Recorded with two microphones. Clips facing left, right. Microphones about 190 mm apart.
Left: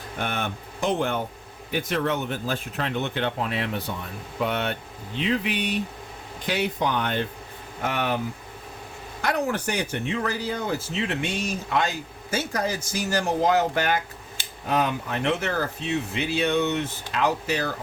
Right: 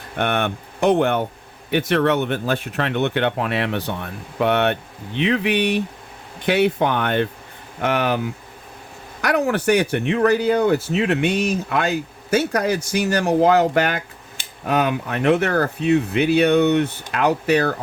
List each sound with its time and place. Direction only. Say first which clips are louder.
0.2 s speech: right 8 dB; 70° right (ahead or behind)
7.8 s speech: right 6 dB; 75° right (ahead or behind)
9.2 s speech: right 7 dB; 75° right (ahead or behind)